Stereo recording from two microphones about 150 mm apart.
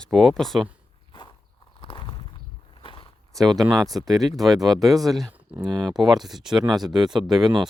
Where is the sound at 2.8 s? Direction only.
35° left (ahead or behind).